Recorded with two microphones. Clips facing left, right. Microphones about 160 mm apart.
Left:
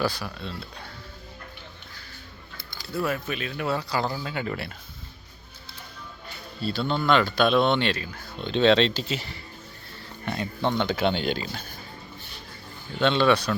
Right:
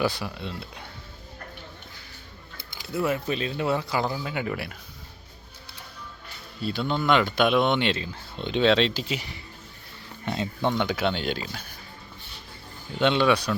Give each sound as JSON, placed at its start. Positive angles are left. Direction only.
{"t": 0.0, "sound": "speech", "side_deg": -20}
{"t": 2.8, "sound": "speech", "side_deg": -20}
{"t": 6.6, "sound": "speech", "side_deg": -15}
{"t": 8.6, "sound": "speech", "side_deg": -5}
{"t": 10.7, "sound": "speech", "side_deg": -10}
{"t": 13.0, "sound": "speech", "side_deg": -15}